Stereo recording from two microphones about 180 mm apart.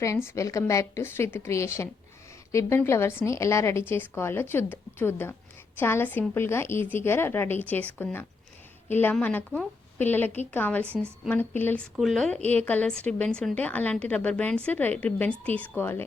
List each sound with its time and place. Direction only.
0.3 s a woman's voice: 15° left (ahead or behind)
10.8 s a woman's voice: 10° right (ahead or behind)
11.3 s a woman's voice: 10° left (ahead or behind)